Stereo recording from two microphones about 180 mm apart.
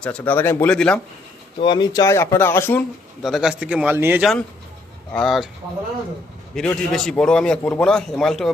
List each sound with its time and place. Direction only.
0.0 s speech: 10° left (ahead or behind)
1.5 s speech: 25° left (ahead or behind)
3.2 s speech: centre (ahead or behind)
5.1 s a man's voice: centre (ahead or behind)
6.5 s a man's voice: 5° left (ahead or behind)